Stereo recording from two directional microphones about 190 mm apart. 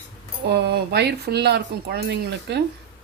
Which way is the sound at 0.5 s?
60° right (ahead or behind).